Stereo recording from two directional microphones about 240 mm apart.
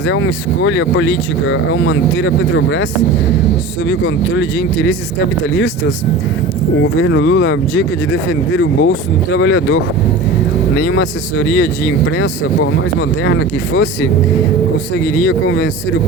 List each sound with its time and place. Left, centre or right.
0.1 s speech: left
3.8 s speech: left
6.8 s speech: left
13.0 s speech: left
15.3 s speech: left